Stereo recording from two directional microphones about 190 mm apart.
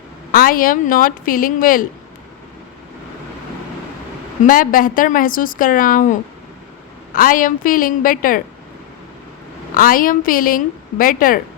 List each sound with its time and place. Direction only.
0.3 s a woman's voice: 50° left (ahead or behind)
4.4 s a woman's voice: 45° left (ahead or behind)
9.7 s a woman's voice: 45° left (ahead or behind)